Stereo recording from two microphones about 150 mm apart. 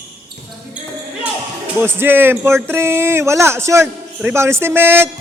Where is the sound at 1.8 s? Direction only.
15° right (ahead or behind).